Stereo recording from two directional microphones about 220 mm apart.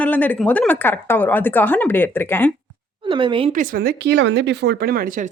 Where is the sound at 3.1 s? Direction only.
20° right (ahead or behind).